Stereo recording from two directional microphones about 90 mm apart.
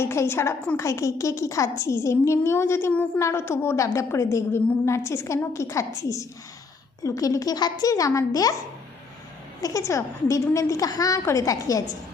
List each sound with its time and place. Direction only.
0.0 s a woman's voice: 30° left (ahead or behind)
9.6 s a woman's voice: 40° left (ahead or behind)